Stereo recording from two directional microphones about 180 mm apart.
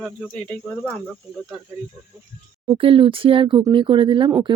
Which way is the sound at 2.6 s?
30° right (ahead or behind).